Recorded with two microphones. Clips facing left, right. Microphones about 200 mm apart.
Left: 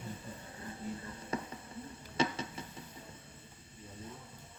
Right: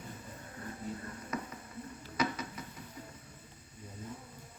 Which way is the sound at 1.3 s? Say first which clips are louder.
Left 2 dB; 30° left (ahead or behind).